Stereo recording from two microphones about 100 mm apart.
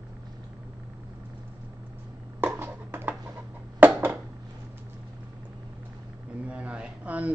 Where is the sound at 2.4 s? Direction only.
20° right (ahead or behind).